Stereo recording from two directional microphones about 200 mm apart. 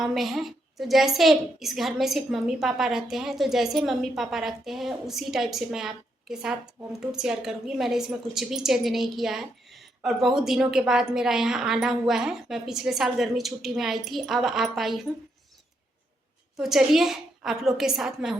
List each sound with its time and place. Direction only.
0.0 s a woman's voice: centre (ahead or behind)
16.6 s a woman's voice: centre (ahead or behind)